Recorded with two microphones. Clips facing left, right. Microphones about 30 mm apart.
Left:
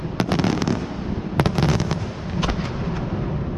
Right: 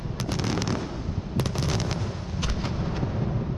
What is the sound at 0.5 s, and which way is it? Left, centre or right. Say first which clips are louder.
Fireworks: left 6 dB; centre.